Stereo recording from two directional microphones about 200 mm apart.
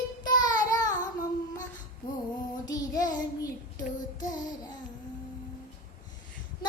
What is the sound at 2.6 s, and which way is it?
Child singing, 20° left (ahead or behind).